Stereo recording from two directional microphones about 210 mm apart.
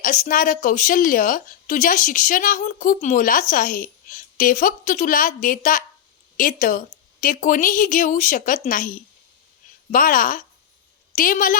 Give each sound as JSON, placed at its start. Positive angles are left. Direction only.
{"t": 0.0, "sound": "a woman's voice", "side_deg": 40}
{"t": 9.9, "sound": "a woman's voice", "side_deg": 40}